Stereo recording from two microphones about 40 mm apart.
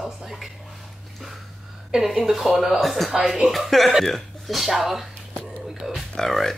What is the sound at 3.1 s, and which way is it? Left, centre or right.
Speech, centre.